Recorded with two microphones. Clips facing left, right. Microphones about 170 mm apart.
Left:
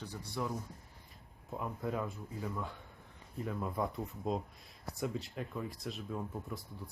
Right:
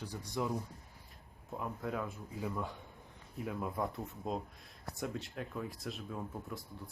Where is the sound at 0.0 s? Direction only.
15° right (ahead or behind).